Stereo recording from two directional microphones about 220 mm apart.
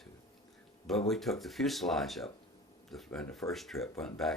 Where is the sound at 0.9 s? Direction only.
Centre (ahead or behind).